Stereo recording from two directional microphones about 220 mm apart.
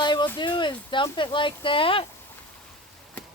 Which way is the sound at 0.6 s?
20° left (ahead or behind).